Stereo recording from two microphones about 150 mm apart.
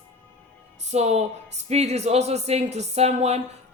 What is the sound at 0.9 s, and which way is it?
A woman's voice, 45° right (ahead or behind).